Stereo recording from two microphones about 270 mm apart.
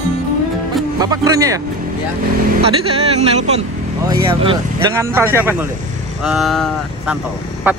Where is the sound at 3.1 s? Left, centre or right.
Right; by 7.8 s centre.